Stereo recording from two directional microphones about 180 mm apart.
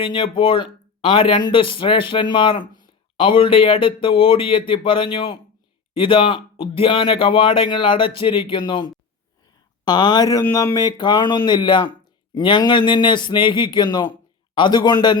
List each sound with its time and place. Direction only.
0.0 s speech: 30° left (ahead or behind)